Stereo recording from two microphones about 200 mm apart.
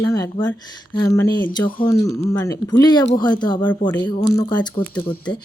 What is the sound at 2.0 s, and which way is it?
Speech, 15° left (ahead or behind).